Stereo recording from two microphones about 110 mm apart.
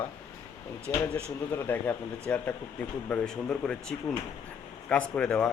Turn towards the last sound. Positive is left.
turn(degrees=10)  # may be behind; listen again after turning